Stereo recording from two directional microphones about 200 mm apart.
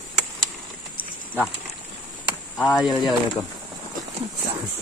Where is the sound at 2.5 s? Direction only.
5° left (ahead or behind).